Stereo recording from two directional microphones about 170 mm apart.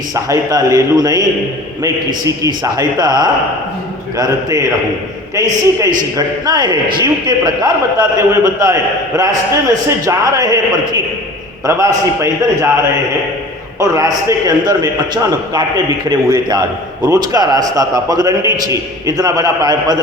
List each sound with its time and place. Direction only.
0.1 s a man's voice: 20° right (ahead or behind)
13.7 s a man's voice: 20° right (ahead or behind)